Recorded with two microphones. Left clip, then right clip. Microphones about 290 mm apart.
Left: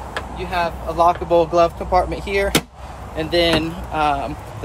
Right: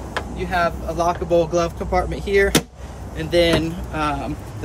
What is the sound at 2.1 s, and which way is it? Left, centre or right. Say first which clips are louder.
Speech: right 2 dB; centre.